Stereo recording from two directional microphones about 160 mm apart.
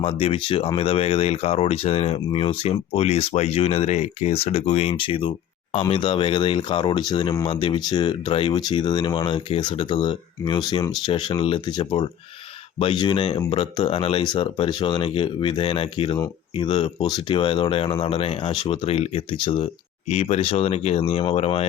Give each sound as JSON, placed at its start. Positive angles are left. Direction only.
{"t": 0.0, "sound": "speech", "side_deg": 35}